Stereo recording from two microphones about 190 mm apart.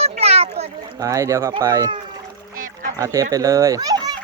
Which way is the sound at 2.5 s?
45° right (ahead or behind).